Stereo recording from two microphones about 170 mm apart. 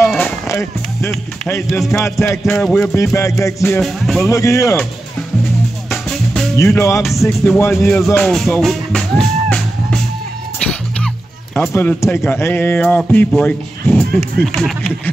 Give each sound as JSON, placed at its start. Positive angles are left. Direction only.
{"t": 0.5, "sound": "music", "side_deg": 15}
{"t": 1.7, "sound": "music", "side_deg": 0}
{"t": 2.0, "sound": "speech", "side_deg": 15}
{"t": 3.0, "sound": "speech", "side_deg": 15}
{"t": 3.8, "sound": "music", "side_deg": 0}
{"t": 4.3, "sound": "speech", "side_deg": 20}
{"t": 5.9, "sound": "music", "side_deg": 0}
{"t": 6.5, "sound": "speech", "side_deg": 15}
{"t": 8.1, "sound": "speech", "side_deg": 5}
{"t": 10.6, "sound": "music", "side_deg": 5}
{"t": 11.5, "sound": "speech", "side_deg": 10}